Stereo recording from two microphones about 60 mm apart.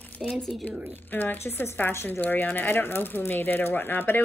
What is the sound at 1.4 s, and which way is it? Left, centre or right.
Speech, left.